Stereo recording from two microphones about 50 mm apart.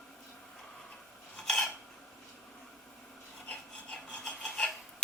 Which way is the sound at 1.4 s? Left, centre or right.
Centre.